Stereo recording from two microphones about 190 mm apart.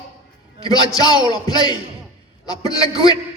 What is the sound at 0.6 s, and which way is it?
A man's voice, 20° left (ahead or behind).